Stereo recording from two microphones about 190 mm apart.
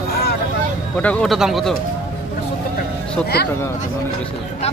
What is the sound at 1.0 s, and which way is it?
Speech, 5° left (ahead or behind).